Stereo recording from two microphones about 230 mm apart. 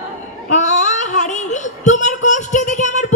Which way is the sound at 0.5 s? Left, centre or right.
Left.